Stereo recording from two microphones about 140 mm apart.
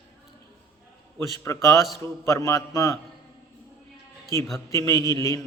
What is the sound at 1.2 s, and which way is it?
A man's voice, 25° left (ahead or behind).